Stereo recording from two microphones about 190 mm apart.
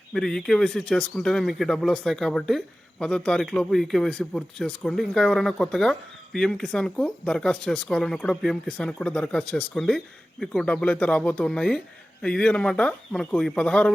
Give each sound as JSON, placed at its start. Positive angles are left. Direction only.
{"t": 0.1, "sound": "speech", "side_deg": 5}